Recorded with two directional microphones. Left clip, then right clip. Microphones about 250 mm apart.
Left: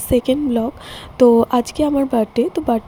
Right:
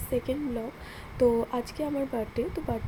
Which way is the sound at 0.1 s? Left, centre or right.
Left.